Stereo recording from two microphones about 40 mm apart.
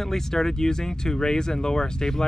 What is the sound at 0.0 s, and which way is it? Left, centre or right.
Speech, centre.